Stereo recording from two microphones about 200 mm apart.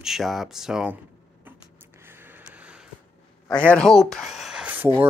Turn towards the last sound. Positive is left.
turn(degrees=-5)  # may be behind; listen again after turning